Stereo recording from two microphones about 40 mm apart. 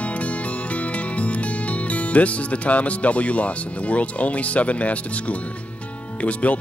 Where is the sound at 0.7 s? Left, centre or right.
Left.